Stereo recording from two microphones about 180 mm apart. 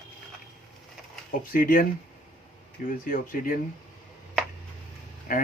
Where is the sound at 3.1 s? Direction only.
50° left (ahead or behind).